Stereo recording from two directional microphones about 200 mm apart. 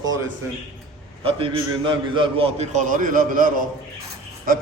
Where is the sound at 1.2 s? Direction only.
25° right (ahead or behind).